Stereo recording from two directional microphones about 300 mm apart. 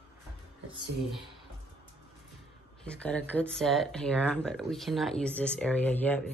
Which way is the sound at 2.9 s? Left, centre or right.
Centre.